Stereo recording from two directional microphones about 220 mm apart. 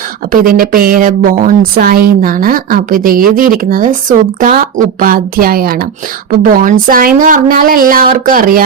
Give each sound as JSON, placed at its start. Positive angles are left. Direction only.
{"t": 0.3, "sound": "a woman's voice", "side_deg": -40}